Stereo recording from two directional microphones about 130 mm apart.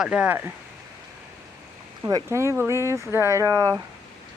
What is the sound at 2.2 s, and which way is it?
Speech, 20° right (ahead or behind).